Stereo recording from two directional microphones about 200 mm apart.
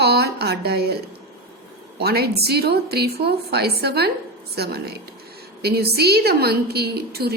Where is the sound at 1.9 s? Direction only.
50° right (ahead or behind).